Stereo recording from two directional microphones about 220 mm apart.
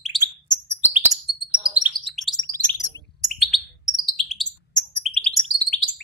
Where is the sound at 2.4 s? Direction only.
15° left (ahead or behind).